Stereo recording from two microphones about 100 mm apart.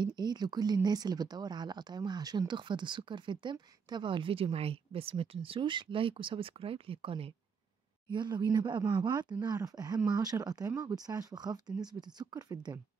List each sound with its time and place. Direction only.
0.0 s speech: 45° right (ahead or behind); by 7.3 s 65° right (ahead or behind)
8.1 s speech: 50° right (ahead or behind)